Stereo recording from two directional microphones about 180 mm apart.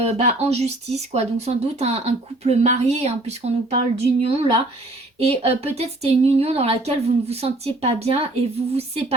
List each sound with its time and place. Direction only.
0.0 s speech: 35° right (ahead or behind)
5.4 s speech: 35° right (ahead or behind)